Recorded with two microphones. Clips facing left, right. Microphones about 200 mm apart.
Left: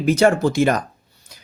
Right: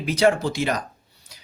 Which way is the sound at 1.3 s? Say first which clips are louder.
Left 3 dB; 50° left (ahead or behind).